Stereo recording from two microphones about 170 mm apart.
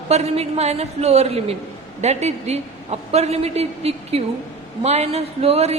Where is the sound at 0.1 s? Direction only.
40° right (ahead or behind).